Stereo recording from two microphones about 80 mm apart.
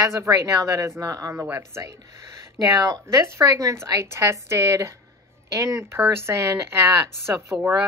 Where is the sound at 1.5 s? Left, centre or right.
Right.